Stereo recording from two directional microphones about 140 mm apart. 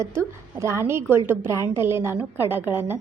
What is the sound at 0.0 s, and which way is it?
A woman's voice, 20° right (ahead or behind).